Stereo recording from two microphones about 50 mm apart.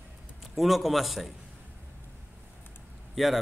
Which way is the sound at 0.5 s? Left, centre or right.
Centre.